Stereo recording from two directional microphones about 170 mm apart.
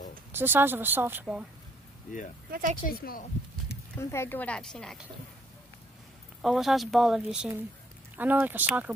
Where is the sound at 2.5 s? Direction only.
50° right (ahead or behind).